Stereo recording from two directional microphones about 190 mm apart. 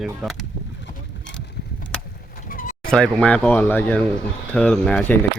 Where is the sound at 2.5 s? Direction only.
45° left (ahead or behind).